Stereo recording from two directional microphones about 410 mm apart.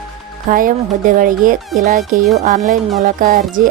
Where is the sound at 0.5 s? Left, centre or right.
Centre.